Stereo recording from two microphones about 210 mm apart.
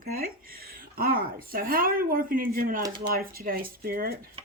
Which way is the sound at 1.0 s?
45° right (ahead or behind).